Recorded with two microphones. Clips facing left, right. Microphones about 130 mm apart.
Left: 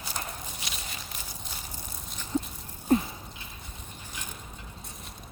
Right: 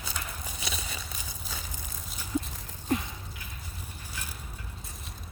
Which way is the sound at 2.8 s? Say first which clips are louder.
Left 6 dB; 30° left (ahead or behind).